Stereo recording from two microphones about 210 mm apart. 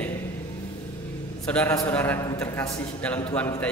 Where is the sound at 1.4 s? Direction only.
5° left (ahead or behind).